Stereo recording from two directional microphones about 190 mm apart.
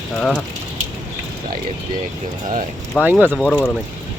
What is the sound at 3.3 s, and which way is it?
Speech, 5° left (ahead or behind).